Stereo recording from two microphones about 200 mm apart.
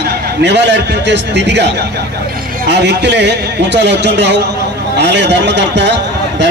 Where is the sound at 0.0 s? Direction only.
60° right (ahead or behind).